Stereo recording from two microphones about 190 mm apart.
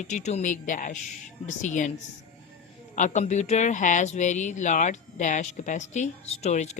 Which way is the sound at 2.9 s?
40° left (ahead or behind).